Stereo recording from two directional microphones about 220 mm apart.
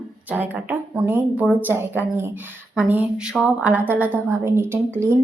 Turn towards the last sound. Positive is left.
turn(degrees=-10)  # may be behind; listen again after turning